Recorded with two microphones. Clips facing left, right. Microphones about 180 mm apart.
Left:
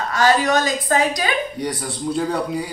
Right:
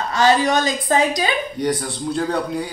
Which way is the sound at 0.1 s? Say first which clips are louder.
Right 1 dB; 25° right (ahead or behind).